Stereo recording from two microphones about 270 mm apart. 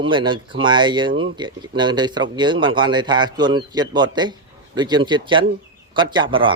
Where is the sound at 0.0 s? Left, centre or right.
Centre.